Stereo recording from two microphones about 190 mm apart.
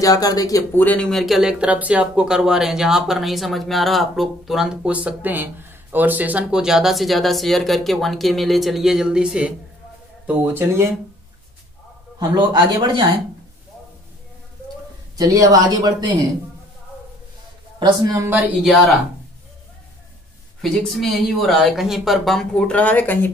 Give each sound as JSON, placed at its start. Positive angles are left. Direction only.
{"t": 0.0, "sound": "speech", "side_deg": 20}
{"t": 12.2, "sound": "speech", "side_deg": -20}
{"t": 15.1, "sound": "speech", "side_deg": -20}
{"t": 17.7, "sound": "speech", "side_deg": -20}
{"t": 20.6, "sound": "speech", "side_deg": 0}